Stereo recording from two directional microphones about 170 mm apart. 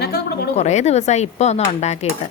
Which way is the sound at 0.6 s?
40° left (ahead or behind).